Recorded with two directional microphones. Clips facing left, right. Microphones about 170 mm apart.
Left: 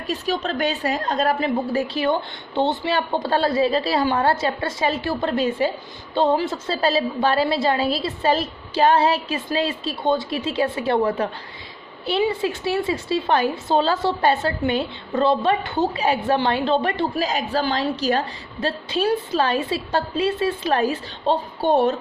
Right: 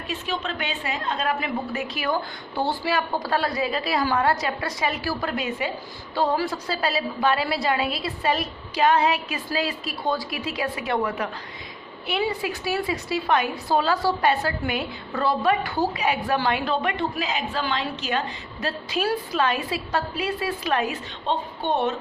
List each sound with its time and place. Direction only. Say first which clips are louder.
0.1 s a woman's voice: left 6 dB; 40° left (ahead or behind)
12.3 s a woman's voice: left 4 dB; 25° left (ahead or behind)